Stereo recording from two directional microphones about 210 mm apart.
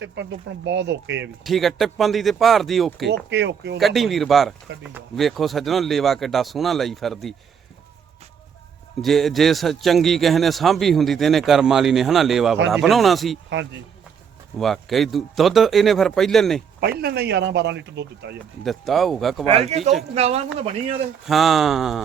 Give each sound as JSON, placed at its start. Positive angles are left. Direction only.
{"t": 0.0, "sound": "speech", "side_deg": -60}
{"t": 1.5, "sound": "a man's voice", "side_deg": 0}
{"t": 3.2, "sound": "speech", "side_deg": -55}
{"t": 3.8, "sound": "a man's voice", "side_deg": 0}
{"t": 9.0, "sound": "a man's voice", "side_deg": 0}
{"t": 14.6, "sound": "a man's voice", "side_deg": 0}
{"t": 17.0, "sound": "speech", "side_deg": -50}
{"t": 18.6, "sound": "a man's voice", "side_deg": 0}
{"t": 19.5, "sound": "speech", "side_deg": -30}
{"t": 21.2, "sound": "a man's voice", "side_deg": 0}